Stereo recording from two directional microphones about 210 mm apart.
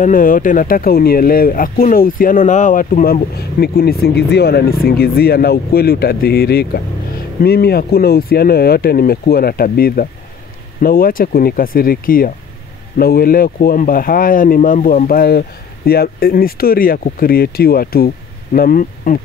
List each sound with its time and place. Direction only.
0.0 s speech: 40° left (ahead or behind)